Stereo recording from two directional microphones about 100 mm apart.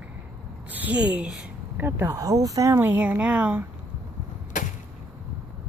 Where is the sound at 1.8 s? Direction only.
20° right (ahead or behind).